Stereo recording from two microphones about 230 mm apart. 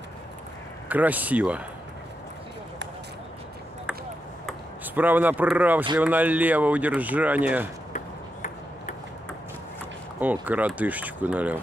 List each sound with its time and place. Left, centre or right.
0.8 s speech: centre
4.5 s speech: centre
7.9 s ping: left
10.2 s speech: centre